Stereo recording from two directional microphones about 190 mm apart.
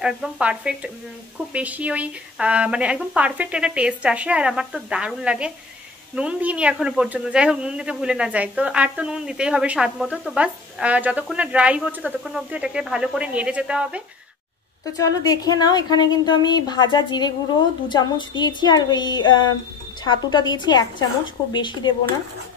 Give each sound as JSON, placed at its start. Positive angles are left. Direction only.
{"t": 0.0, "sound": "a woman's voice", "side_deg": -5}
{"t": 14.9, "sound": "a woman's voice", "side_deg": 20}